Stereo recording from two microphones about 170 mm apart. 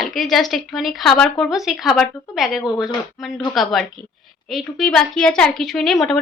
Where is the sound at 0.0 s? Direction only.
Centre (ahead or behind).